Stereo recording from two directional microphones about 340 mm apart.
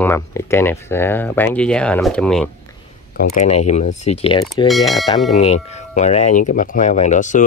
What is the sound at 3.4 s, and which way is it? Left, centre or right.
Speech, centre.